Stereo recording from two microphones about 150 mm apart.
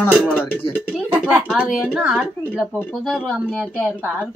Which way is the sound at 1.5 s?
5° right (ahead or behind).